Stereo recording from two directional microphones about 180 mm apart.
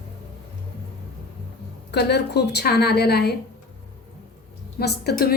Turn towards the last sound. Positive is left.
turn(degrees=60)  # may be behind; listen again after turning